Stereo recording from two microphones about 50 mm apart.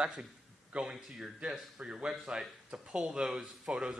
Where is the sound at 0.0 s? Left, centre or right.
Centre.